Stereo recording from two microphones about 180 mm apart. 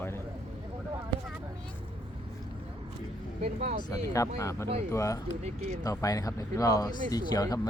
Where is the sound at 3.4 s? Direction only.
35° right (ahead or behind).